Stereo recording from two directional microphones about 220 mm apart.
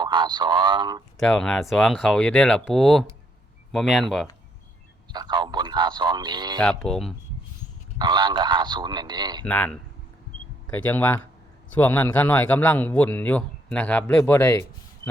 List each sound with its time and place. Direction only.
0.0 s speech: 20° right (ahead or behind)
1.2 s speech: 5° left (ahead or behind)
5.1 s speech: 20° right (ahead or behind)
6.6 s speech: 5° left (ahead or behind)
7.9 s speech: 20° right (ahead or behind)
9.4 s a man's voice: 5° left (ahead or behind)
10.8 s a man's voice: 10° left (ahead or behind)